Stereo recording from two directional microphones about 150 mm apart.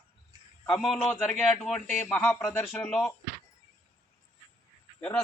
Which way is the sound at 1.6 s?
10° left (ahead or behind).